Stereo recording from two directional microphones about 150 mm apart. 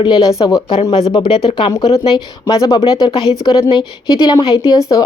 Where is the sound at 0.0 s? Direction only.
25° left (ahead or behind).